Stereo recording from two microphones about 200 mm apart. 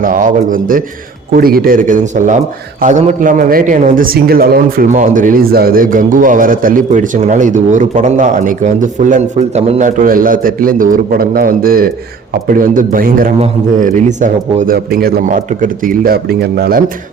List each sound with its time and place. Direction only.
0.0 s a man's voice: 45° right (ahead or behind)
14.8 s a man's voice: 50° right (ahead or behind)